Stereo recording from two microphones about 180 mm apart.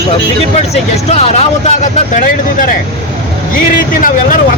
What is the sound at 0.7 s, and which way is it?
Speech, 35° left (ahead or behind).